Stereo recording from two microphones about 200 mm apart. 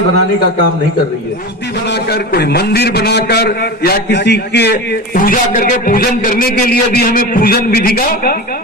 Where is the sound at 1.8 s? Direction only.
55° left (ahead or behind).